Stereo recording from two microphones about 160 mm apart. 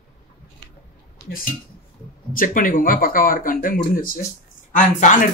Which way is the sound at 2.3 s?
55° left (ahead or behind).